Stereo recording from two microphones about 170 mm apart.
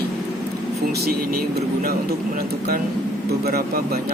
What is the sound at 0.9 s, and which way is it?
Speech, 65° right (ahead or behind).